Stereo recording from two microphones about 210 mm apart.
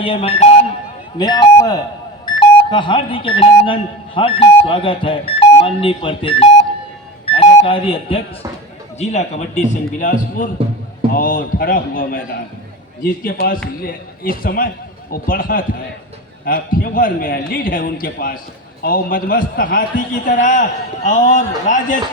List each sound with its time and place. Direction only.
0.0 s speech: 30° left (ahead or behind)
1.2 s a man's voice: 20° left (ahead or behind); by 22.0 s 35° left (ahead or behind)